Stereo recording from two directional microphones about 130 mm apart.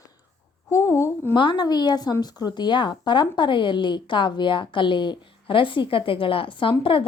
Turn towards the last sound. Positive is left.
turn(degrees=40)  # may be behind; listen again after turning